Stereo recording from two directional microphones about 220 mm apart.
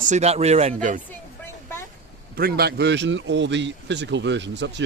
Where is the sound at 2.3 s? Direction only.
45° right (ahead or behind).